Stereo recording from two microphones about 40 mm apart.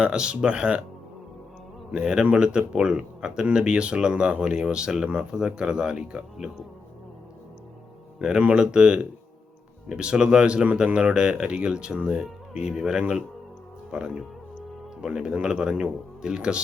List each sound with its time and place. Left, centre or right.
0.0 s speech: right
1.9 s speech: right
8.2 s speech: right